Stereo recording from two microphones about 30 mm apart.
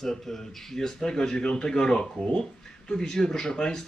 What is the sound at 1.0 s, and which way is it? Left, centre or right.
A man's voice, left.